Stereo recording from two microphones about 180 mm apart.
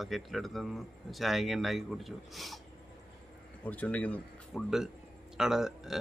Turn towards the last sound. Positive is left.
turn(degrees=0)  # may be behind; listen again after turning